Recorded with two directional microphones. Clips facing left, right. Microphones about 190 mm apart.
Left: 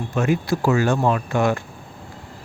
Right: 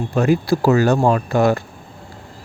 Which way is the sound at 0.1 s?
35° right (ahead or behind).